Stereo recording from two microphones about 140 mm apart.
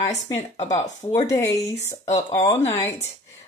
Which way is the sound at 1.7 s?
55° left (ahead or behind).